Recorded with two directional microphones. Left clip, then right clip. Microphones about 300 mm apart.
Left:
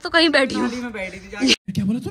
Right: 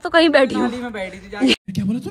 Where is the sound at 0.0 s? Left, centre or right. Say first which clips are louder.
Right 3 dB; centre.